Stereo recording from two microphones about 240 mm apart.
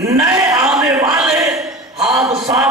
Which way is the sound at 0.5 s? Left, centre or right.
Centre.